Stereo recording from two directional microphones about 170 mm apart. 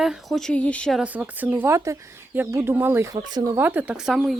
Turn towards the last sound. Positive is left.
turn(degrees=-5)  # may be behind; listen again after turning